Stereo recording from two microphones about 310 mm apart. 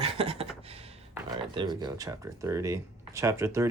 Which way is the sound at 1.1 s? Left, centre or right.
Centre.